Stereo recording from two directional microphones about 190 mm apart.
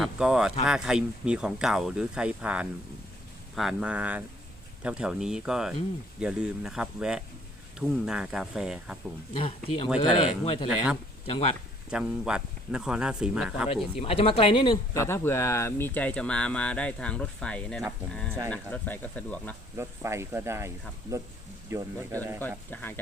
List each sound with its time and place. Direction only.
0.0 s speech: 5° right (ahead or behind)
9.3 s speech: 30° left (ahead or behind)
11.9 s speech: 5° right (ahead or behind)
13.9 s speech: 30° left (ahead or behind)
15.0 s speech: 15° left (ahead or behind)
19.7 s speech: 15° right (ahead or behind)
22.4 s speech: 10° left (ahead or behind)